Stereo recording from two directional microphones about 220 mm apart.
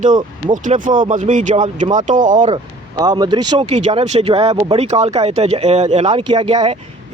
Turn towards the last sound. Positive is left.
turn(degrees=-25)  # may be behind; listen again after turning